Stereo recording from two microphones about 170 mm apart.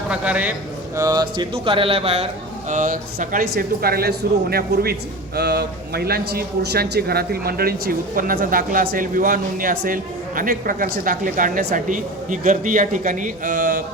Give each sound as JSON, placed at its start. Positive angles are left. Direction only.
{"t": 0.1, "sound": "a man's voice", "side_deg": -10}
{"t": 0.9, "sound": "speech", "side_deg": -20}